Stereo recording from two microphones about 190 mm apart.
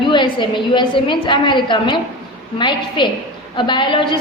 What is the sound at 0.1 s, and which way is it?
A woman's voice, 25° left (ahead or behind).